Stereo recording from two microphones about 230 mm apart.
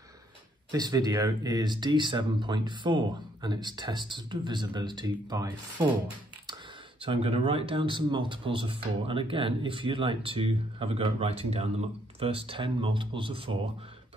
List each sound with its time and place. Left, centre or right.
0.7 s speech: centre
7.0 s speech: right